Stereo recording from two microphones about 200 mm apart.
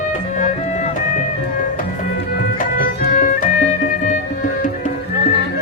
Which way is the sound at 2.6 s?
45° left (ahead or behind).